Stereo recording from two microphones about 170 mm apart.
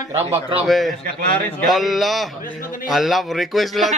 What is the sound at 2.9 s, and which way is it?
Speech, centre (ahead or behind).